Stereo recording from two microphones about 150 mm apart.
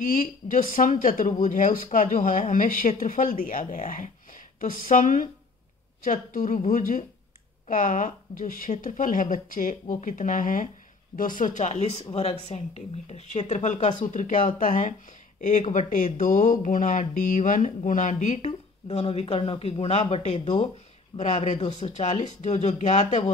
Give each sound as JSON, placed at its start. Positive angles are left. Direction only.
{"t": 0.0, "sound": "speech", "side_deg": 65}